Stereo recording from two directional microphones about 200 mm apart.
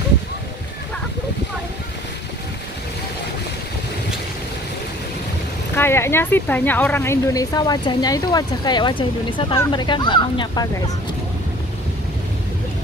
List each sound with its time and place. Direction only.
5.8 s speech: 10° left (ahead or behind)